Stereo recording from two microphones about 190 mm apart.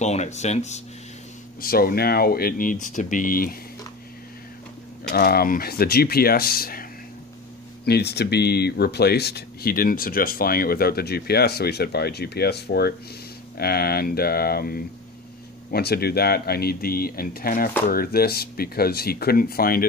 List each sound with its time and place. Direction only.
0.0 s speech: 35° left (ahead or behind)
1.6 s speech: 50° left (ahead or behind)
5.1 s speech: 55° left (ahead or behind)